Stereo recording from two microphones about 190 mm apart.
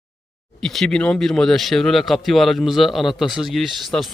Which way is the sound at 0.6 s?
Centre (ahead or behind).